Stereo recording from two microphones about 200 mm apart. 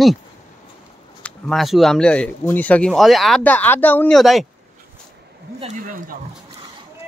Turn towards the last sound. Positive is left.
turn(degrees=-45)  # may be behind; listen again after turning